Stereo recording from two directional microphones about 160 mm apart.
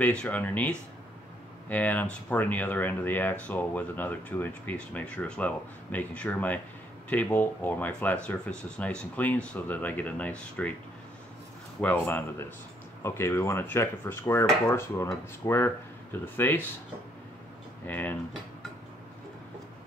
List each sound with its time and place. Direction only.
0.0 s speech: 10° left (ahead or behind)
11.8 s speech: 10° left (ahead or behind)
17.8 s speech: 10° left (ahead or behind)